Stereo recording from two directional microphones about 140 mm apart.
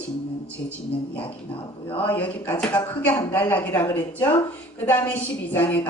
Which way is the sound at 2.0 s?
10° left (ahead or behind).